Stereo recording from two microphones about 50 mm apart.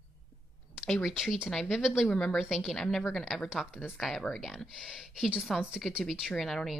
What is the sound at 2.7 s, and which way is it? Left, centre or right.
A woman's voice, centre.